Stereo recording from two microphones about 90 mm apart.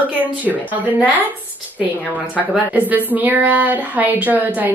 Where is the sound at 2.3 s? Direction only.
15° right (ahead or behind).